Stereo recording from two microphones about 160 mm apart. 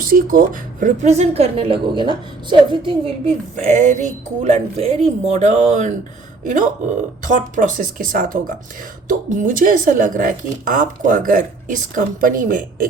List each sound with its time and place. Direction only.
0.0 s a woman's voice: 60° right (ahead or behind); by 3.3 s 35° right (ahead or behind)
3.5 s a woman's voice: 45° right (ahead or behind)